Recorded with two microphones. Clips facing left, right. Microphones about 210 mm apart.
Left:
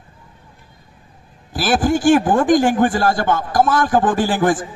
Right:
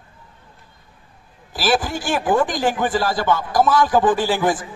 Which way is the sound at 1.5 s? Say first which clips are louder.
Left 4 dB; 50° left (ahead or behind).